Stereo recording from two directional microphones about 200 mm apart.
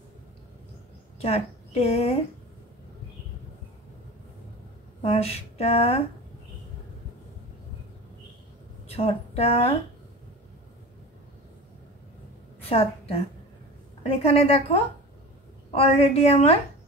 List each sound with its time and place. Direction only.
1.2 s a woman's voice: 30° left (ahead or behind)
5.0 s speech: 30° left (ahead or behind)
8.9 s speech: 30° left (ahead or behind)
12.6 s a woman's voice: 30° left (ahead or behind)